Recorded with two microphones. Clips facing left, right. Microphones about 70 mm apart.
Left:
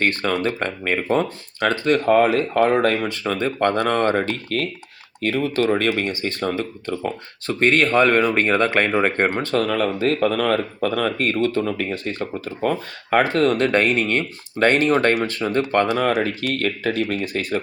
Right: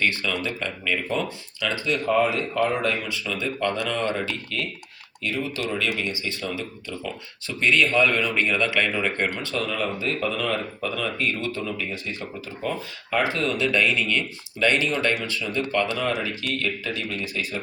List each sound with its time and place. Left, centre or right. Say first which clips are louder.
0.0 s speech: left 5 dB; left